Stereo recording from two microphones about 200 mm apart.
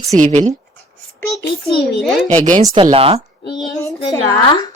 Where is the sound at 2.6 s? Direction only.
25° right (ahead or behind).